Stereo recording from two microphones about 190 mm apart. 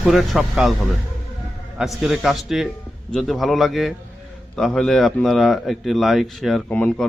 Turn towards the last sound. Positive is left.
turn(degrees=5)  # may be behind; listen again after turning